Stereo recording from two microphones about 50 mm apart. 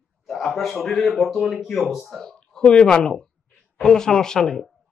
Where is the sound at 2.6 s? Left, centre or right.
Centre.